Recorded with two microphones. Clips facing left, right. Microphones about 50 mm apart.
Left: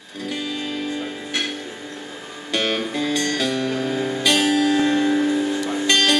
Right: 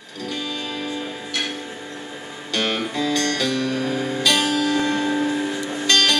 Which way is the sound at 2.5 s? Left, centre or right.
Left.